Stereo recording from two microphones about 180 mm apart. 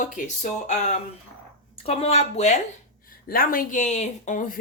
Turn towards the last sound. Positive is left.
turn(degrees=45)  # may be behind; listen again after turning